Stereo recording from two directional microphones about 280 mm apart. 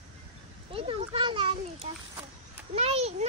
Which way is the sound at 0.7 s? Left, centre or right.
Centre.